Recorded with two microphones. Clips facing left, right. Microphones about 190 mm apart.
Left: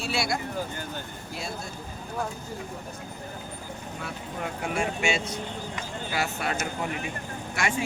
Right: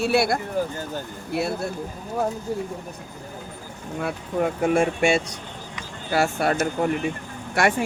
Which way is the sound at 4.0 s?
50° right (ahead or behind).